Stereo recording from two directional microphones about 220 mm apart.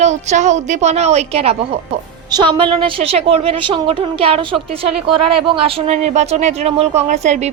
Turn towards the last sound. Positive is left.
turn(degrees=-30)  # may be behind; listen again after turning